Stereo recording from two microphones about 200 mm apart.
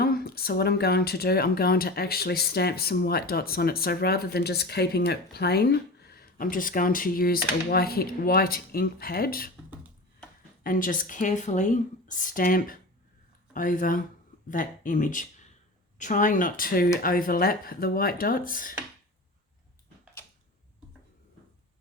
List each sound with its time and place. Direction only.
0.0 s speech: 50° left (ahead or behind)
10.6 s speech: 45° left (ahead or behind)